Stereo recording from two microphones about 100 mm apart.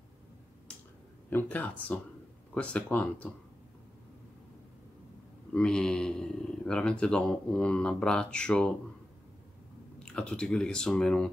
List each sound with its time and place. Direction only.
1.3 s speech: 15° left (ahead or behind)
5.5 s speech: 10° left (ahead or behind)
9.9 s speech: 10° left (ahead or behind)